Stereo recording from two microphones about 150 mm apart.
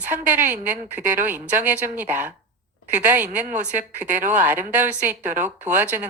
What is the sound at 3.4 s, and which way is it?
Speech, 55° right (ahead or behind).